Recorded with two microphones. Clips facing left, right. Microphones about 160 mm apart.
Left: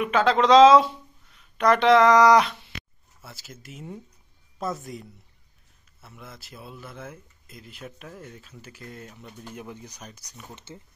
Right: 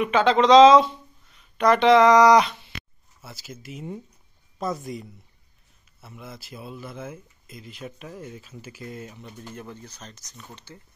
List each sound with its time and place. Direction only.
0.0 s speech: centre (ahead or behind)
9.4 s speech: 10° left (ahead or behind)